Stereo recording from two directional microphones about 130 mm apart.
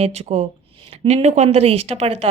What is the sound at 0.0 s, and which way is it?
Speech, 55° right (ahead or behind).